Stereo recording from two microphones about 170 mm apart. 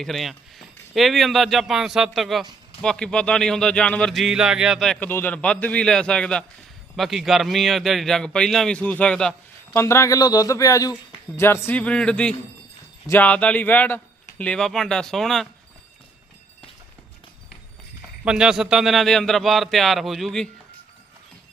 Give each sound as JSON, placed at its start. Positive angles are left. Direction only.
{"t": 0.0, "sound": "speech", "side_deg": 0}
{"t": 9.7, "sound": "speech", "side_deg": 15}
{"t": 18.3, "sound": "speech", "side_deg": -5}